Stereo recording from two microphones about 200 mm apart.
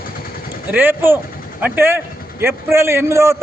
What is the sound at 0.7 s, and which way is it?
A man's voice, 10° right (ahead or behind).